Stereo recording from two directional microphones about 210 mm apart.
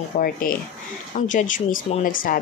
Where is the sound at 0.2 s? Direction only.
45° left (ahead or behind).